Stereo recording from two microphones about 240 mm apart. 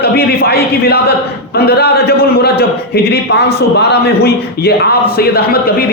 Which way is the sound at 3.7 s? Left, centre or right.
Left.